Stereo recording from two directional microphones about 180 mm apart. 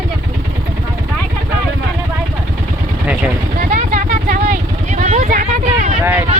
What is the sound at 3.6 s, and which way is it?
Vehicle, 45° right (ahead or behind).